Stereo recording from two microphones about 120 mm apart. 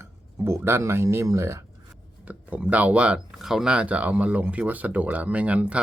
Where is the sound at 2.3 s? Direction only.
10° right (ahead or behind).